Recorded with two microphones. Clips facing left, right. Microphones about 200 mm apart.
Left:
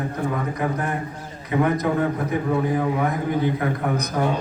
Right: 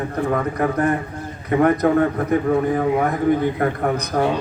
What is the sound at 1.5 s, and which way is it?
Speech, 55° right (ahead or behind).